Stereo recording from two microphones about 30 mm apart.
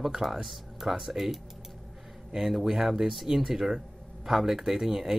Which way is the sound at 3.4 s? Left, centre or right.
Centre.